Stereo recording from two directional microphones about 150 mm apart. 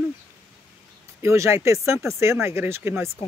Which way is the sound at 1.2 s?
20° right (ahead or behind).